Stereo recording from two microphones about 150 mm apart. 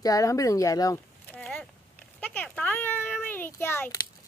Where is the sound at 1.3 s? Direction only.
5° left (ahead or behind).